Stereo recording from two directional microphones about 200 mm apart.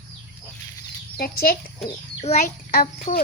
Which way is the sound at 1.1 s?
50° left (ahead or behind).